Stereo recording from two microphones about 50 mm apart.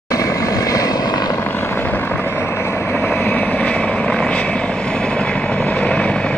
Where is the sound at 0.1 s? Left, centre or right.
Left.